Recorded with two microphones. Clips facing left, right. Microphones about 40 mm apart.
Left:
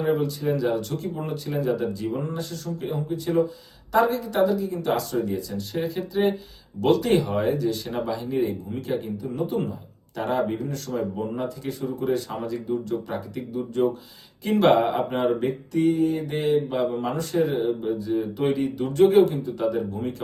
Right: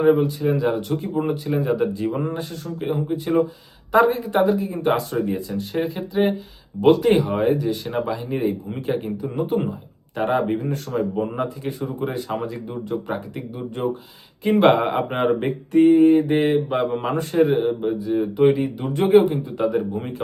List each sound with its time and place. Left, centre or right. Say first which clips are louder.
0.0 s speech: right 6 dB; right
14.8 s speech: right 2 dB; right